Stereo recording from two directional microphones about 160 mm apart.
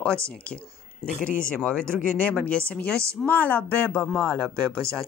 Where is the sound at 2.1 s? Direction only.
10° left (ahead or behind).